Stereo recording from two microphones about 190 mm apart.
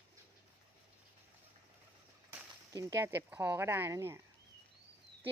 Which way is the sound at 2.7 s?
15° right (ahead or behind).